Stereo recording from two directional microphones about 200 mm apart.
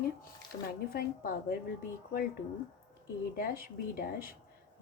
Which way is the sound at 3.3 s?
45° left (ahead or behind).